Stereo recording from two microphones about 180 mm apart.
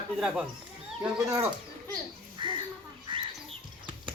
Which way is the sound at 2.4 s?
25° right (ahead or behind).